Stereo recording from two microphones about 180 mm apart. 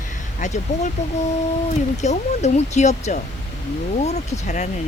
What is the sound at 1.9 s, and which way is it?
Speech, 40° left (ahead or behind).